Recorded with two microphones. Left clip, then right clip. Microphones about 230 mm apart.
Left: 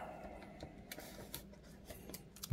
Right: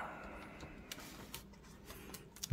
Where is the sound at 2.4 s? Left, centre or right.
Centre.